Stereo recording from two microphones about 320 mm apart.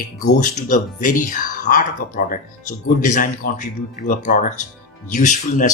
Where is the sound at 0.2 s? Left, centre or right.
Left.